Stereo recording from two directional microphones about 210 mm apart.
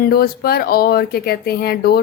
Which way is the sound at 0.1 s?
45° left (ahead or behind).